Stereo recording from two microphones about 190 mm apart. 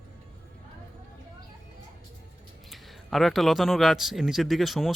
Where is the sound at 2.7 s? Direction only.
Centre (ahead or behind).